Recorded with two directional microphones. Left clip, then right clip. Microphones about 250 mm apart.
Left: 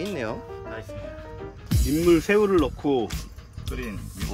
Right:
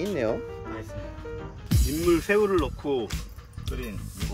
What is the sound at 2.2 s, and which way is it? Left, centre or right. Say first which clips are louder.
Speech: left 3 dB; left.